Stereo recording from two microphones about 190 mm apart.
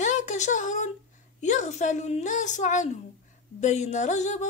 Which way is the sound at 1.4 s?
40° left (ahead or behind).